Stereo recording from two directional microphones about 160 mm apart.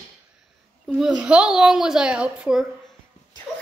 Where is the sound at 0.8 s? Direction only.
5° right (ahead or behind).